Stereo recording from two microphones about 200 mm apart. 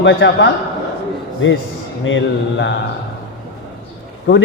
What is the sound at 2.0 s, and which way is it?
Speech, 65° left (ahead or behind).